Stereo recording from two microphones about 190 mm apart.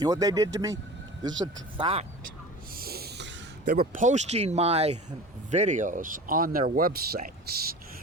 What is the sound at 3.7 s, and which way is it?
Speech, 45° right (ahead or behind).